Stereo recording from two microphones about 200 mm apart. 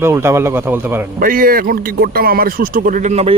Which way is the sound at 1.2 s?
45° right (ahead or behind).